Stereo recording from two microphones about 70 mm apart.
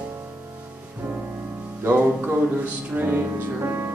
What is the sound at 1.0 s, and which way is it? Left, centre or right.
Music, centre.